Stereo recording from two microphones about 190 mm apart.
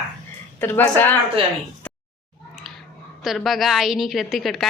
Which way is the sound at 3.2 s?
Centre (ahead or behind).